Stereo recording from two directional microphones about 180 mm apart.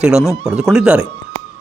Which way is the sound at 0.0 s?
5° right (ahead or behind).